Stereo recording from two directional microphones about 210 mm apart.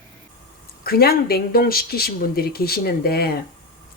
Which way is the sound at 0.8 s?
45° left (ahead or behind).